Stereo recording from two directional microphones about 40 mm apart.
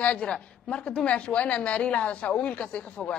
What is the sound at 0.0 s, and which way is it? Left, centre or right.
A woman's voice, left.